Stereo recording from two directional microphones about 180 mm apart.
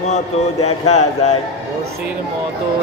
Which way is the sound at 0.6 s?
35° left (ahead or behind).